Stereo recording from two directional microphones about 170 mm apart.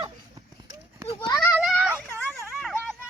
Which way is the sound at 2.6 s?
Centre (ahead or behind).